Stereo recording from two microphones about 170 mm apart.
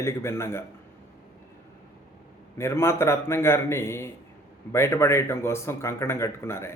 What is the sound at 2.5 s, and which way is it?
Speech, 15° left (ahead or behind).